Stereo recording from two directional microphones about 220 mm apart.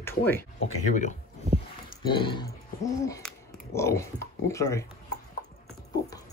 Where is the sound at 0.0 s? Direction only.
10° left (ahead or behind).